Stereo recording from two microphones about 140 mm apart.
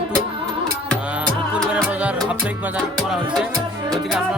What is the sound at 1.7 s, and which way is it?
Music, 10° right (ahead or behind).